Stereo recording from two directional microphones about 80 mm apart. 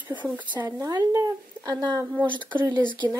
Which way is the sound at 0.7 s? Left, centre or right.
Right.